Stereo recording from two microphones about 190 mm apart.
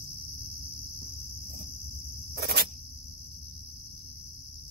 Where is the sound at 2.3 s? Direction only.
55° right (ahead or behind).